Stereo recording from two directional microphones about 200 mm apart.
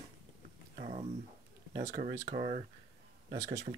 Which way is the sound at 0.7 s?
40° right (ahead or behind).